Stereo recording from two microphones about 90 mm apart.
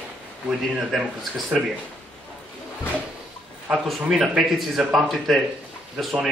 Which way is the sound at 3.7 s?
5° right (ahead or behind).